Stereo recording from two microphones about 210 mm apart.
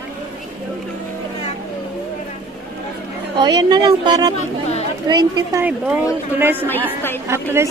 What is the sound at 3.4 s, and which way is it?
Speech, 20° right (ahead or behind).